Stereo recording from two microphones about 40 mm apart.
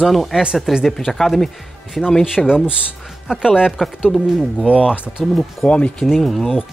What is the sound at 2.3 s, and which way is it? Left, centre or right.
Speech, centre.